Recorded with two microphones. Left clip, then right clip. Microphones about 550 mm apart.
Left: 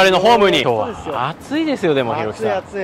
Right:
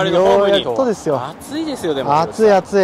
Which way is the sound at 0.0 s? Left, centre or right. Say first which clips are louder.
Left 1 dB; left.